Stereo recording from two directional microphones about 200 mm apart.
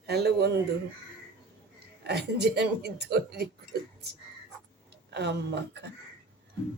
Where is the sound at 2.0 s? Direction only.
55° right (ahead or behind).